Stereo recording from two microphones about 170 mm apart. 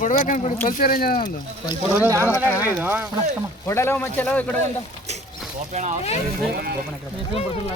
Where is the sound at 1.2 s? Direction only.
25° left (ahead or behind).